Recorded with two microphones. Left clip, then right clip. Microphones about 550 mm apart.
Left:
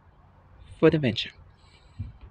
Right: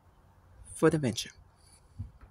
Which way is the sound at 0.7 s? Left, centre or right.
Right.